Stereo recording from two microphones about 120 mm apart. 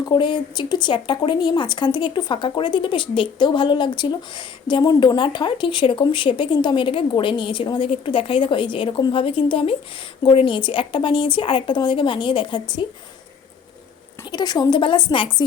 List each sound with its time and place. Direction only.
0.0 s speech: 40° left (ahead or behind)
14.3 s a woman's voice: 35° left (ahead or behind)